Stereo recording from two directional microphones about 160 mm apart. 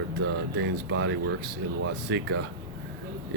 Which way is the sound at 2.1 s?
90° right.